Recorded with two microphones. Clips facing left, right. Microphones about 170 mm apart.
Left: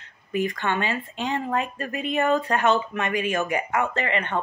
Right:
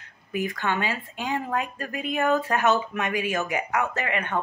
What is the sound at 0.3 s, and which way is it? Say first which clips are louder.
Speech: left 2 dB; 5° right (ahead or behind).